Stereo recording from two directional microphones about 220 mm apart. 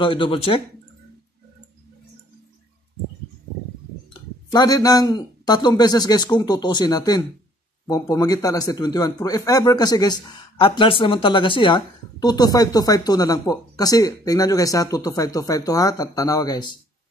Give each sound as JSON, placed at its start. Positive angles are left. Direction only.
{"t": 0.0, "sound": "speech", "side_deg": 25}
{"t": 4.5, "sound": "a man's voice", "side_deg": 15}